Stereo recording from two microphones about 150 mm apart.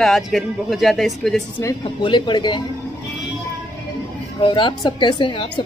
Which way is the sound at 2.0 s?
30° left (ahead or behind).